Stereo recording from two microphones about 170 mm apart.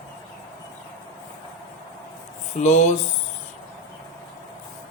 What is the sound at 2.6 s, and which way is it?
Speech, 40° left (ahead or behind).